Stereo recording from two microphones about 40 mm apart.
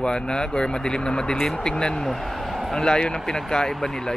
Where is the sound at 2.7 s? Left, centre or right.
Centre.